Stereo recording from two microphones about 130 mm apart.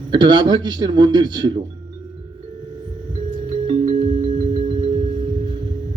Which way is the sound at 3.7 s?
50° right (ahead or behind).